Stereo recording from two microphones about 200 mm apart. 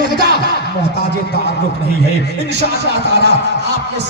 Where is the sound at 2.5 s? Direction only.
55° right (ahead or behind).